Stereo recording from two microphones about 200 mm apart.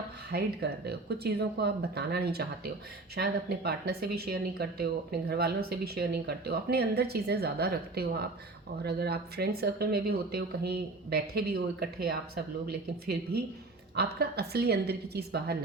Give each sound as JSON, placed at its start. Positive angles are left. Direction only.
{"t": 0.3, "sound": "speech", "side_deg": -55}